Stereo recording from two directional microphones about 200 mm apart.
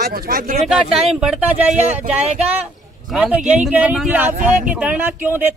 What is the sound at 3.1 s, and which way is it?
Speech, 5° right (ahead or behind).